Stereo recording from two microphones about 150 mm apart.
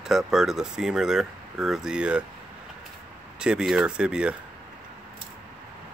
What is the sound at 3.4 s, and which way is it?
Speech, 5° right (ahead or behind).